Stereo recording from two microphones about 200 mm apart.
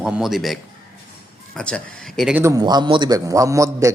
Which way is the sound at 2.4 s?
20° right (ahead or behind).